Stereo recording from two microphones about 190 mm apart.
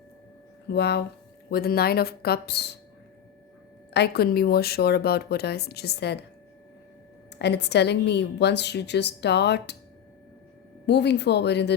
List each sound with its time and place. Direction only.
0.7 s a woman's voice: 60° left (ahead or behind)
3.9 s a woman's voice: 60° left (ahead or behind)
7.3 s a woman's voice: 60° left (ahead or behind)
10.8 s a woman's voice: 60° left (ahead or behind)